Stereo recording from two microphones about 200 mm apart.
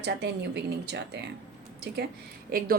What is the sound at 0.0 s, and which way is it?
Speech, 60° right (ahead or behind).